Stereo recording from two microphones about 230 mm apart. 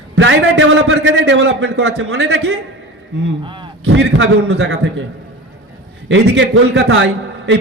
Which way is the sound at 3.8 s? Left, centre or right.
Right.